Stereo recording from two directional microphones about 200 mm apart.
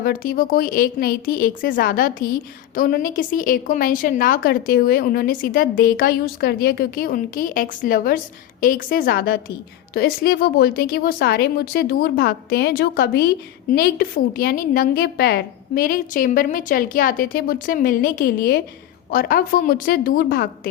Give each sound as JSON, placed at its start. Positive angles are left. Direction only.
{"t": 0.0, "sound": "speech", "side_deg": 45}